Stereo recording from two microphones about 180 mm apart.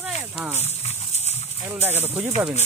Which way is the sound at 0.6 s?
35° left (ahead or behind).